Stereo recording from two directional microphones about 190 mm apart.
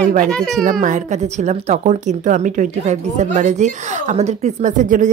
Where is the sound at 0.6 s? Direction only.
45° right (ahead or behind).